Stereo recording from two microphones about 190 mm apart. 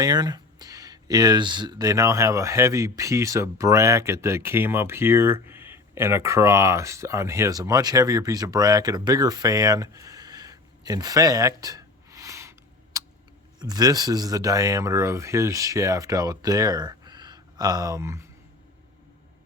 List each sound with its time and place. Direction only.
0.0 s speech: 20° right (ahead or behind)